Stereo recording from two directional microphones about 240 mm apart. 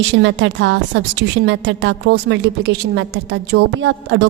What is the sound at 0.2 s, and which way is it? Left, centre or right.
A woman's voice, right.